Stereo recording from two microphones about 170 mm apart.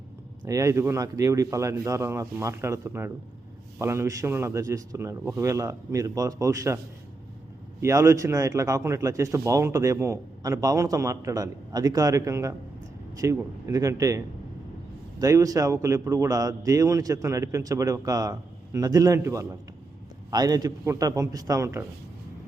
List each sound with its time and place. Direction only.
0.4 s a man's voice: 20° right (ahead or behind)
7.8 s speech: 15° right (ahead or behind)
15.2 s speech: 20° right (ahead or behind)